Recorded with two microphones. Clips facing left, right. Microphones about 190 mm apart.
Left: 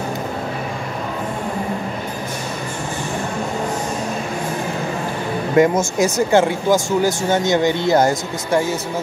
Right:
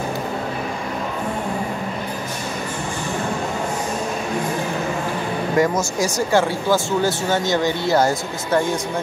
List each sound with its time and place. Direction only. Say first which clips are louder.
5.6 s speech: left 5 dB; 20° left (ahead or behind)